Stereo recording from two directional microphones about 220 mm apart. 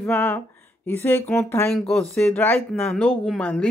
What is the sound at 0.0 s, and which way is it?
Speech, 5° left (ahead or behind).